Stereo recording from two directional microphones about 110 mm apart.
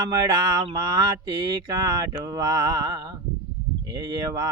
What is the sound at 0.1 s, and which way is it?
Music, 35° right (ahead or behind).